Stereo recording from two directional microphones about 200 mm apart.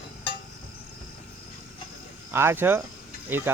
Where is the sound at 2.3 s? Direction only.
10° right (ahead or behind).